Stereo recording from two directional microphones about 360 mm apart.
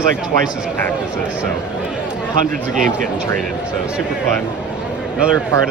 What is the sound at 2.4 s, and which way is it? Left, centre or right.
Speech, right.